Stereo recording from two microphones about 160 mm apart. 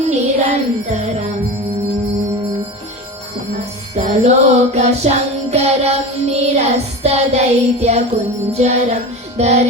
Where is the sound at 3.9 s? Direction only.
45° right (ahead or behind).